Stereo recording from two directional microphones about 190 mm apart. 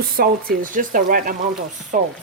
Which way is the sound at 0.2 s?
50° right (ahead or behind).